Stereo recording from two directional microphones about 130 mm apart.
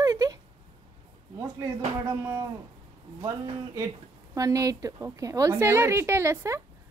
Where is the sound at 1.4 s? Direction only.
25° right (ahead or behind).